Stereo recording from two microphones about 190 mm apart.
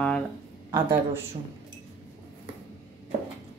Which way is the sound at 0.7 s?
15° right (ahead or behind).